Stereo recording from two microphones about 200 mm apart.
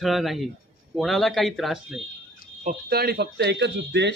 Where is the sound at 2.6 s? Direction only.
45° right (ahead or behind).